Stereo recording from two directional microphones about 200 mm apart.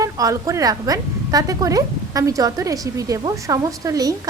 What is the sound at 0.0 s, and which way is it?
A woman's voice, 15° right (ahead or behind).